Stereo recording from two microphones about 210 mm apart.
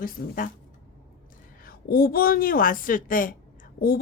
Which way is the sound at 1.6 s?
45° left (ahead or behind).